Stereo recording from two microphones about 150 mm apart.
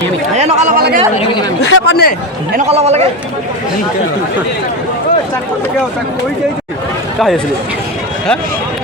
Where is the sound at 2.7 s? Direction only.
45° right (ahead or behind).